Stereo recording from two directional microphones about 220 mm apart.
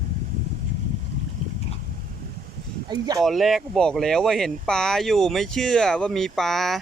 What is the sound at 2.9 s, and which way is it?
Speech, 15° right (ahead or behind).